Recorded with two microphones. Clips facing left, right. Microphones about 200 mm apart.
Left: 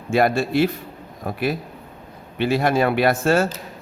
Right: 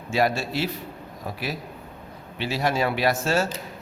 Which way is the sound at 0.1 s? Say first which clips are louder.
Left 5 dB; 55° left (ahead or behind).